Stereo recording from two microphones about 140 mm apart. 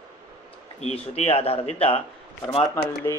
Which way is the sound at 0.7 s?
50° left (ahead or behind).